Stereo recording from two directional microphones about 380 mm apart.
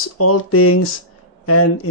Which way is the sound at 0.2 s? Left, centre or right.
Left.